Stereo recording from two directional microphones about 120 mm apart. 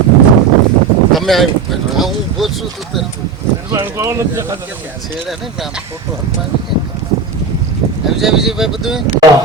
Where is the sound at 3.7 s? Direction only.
20° right (ahead or behind).